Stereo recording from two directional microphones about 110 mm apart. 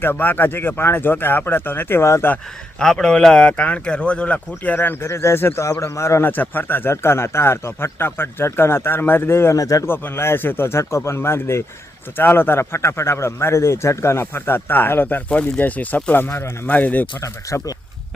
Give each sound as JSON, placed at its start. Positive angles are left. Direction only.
{"t": 0.0, "sound": "speech", "side_deg": 15}
{"t": 2.3, "sound": "speech", "side_deg": 5}
{"t": 9.8, "sound": "speech", "side_deg": 20}
{"t": 17.2, "sound": "speech", "side_deg": 30}